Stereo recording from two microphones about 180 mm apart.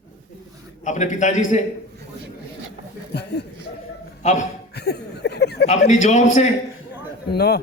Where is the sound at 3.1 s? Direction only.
65° left (ahead or behind).